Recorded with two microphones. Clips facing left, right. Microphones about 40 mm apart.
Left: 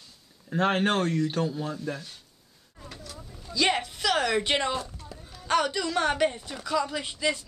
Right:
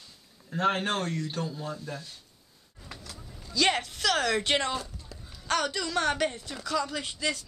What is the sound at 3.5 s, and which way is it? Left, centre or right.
Speech, centre.